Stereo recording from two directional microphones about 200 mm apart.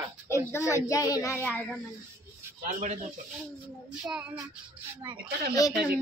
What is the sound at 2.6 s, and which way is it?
Speech, 35° right (ahead or behind).